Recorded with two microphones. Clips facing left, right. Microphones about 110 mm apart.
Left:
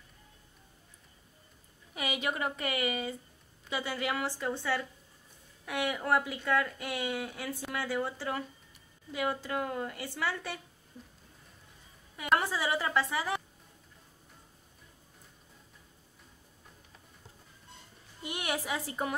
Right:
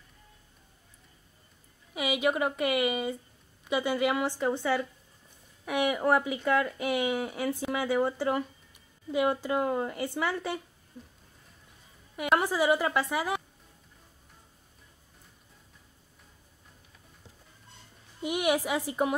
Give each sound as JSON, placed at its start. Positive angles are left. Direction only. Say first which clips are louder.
{"t": 2.0, "sound": "a woman's voice", "louder": "right 6 dB", "side_deg": -10}
{"t": 12.4, "sound": "speech", "louder": "right 6 dB", "side_deg": -15}
{"t": 18.2, "sound": "speech", "louder": "right 8 dB", "side_deg": -15}